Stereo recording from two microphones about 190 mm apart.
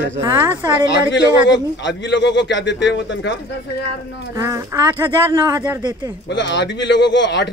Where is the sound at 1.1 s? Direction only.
70° left (ahead or behind).